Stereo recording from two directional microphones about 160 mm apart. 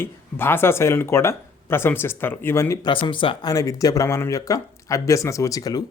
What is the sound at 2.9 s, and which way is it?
Speech, 30° left (ahead or behind).